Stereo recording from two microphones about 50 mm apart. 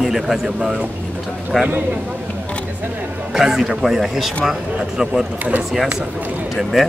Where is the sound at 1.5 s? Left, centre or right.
Centre.